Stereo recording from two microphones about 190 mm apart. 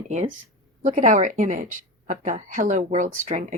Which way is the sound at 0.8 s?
40° right (ahead or behind).